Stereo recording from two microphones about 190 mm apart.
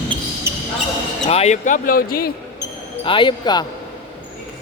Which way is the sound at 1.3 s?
35° left (ahead or behind).